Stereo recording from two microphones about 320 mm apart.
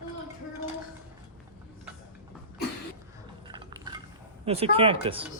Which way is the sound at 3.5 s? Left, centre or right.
Centre.